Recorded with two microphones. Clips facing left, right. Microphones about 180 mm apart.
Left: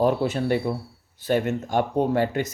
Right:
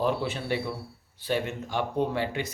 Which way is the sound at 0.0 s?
45° left (ahead or behind).